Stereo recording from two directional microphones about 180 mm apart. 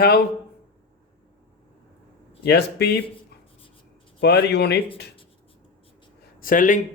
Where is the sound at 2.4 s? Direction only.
65° left (ahead or behind).